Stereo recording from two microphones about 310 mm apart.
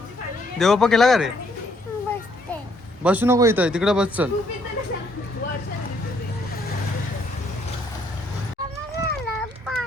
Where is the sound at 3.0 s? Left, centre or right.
Centre.